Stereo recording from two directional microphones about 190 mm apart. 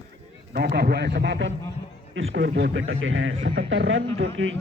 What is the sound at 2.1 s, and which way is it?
Speech, 80° right.